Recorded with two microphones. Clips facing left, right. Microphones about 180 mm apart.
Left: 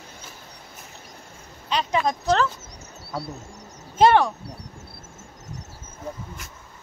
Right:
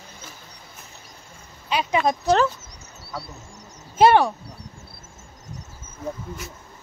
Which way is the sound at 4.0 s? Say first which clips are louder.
Right 1 dB; 5° right (ahead or behind).